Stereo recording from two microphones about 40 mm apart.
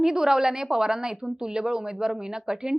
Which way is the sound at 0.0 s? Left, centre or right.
Centre.